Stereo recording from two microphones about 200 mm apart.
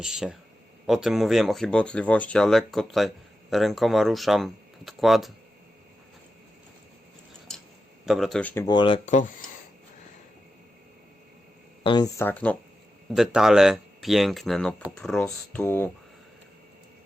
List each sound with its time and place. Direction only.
0.0 s speech: 5° right (ahead or behind)
8.0 s speech: centre (ahead or behind)
8.6 s speech: 25° left (ahead or behind)
11.8 s speech: 25° left (ahead or behind)